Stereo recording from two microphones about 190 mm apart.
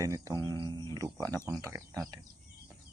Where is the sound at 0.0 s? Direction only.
15° right (ahead or behind).